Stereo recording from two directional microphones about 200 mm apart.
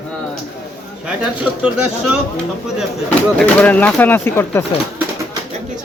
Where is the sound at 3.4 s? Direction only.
5° left (ahead or behind).